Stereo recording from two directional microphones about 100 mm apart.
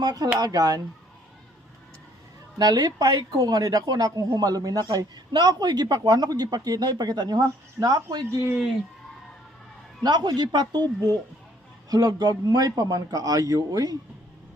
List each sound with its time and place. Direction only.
0.0 s speech: 40° right (ahead or behind)
2.6 s speech: 45° right (ahead or behind)
10.0 s speech: 45° right (ahead or behind)
11.9 s speech: 40° right (ahead or behind)